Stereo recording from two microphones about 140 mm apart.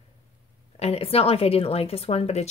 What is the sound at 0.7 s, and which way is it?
Speech, 45° left (ahead or behind).